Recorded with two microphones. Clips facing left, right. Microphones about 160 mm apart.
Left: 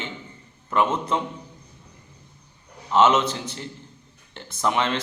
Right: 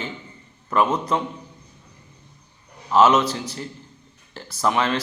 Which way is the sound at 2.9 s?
25° left (ahead or behind).